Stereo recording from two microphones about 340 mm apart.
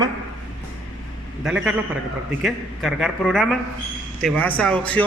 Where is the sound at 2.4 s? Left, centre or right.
Centre.